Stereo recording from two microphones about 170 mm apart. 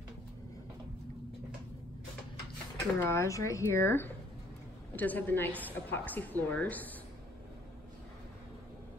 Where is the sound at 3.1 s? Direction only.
15° left (ahead or behind).